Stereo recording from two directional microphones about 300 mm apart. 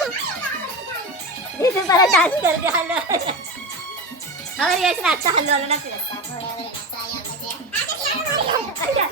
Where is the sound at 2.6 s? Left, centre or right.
Centre.